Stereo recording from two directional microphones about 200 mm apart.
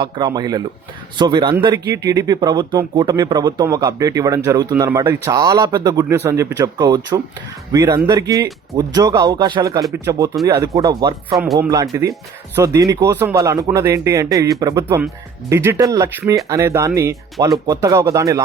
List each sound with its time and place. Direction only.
0.0 s speech: 20° right (ahead or behind)